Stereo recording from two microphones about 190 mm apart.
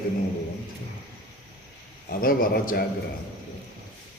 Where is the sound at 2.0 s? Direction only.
50° left (ahead or behind).